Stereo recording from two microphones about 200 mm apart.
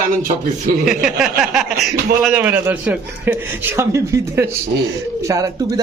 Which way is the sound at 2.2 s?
5° right (ahead or behind).